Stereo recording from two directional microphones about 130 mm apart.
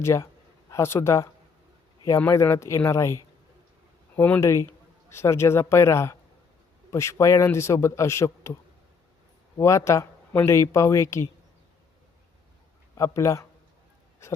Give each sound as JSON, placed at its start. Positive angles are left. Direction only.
{"t": 0.0, "sound": "speech", "side_deg": 20}
{"t": 9.6, "sound": "speech", "side_deg": 25}
{"t": 13.0, "sound": "speech", "side_deg": 20}